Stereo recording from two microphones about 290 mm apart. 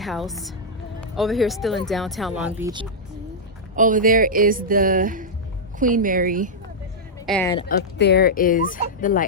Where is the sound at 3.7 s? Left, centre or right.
Right.